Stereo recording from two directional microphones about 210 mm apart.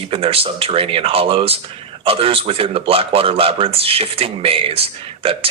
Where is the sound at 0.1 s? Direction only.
25° right (ahead or behind).